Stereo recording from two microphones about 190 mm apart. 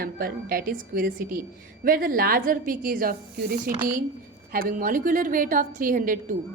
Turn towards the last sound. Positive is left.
turn(degrees=-45)  # may be behind; listen again after turning